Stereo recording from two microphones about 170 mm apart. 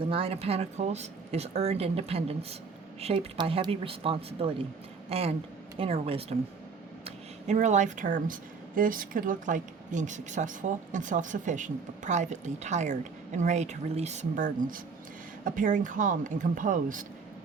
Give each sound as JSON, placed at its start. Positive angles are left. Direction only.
{"t": 0.0, "sound": "speech", "side_deg": -35}